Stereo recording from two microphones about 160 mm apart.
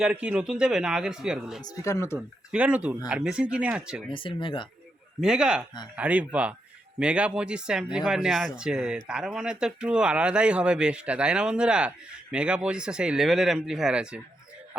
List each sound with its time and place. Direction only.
0.0 s speech: 5° right (ahead or behind)
1.6 s speech: 20° left (ahead or behind)
2.1 s speech: 5° right (ahead or behind)
4.1 s speech: 30° left (ahead or behind)
5.2 s speech: 5° right (ahead or behind)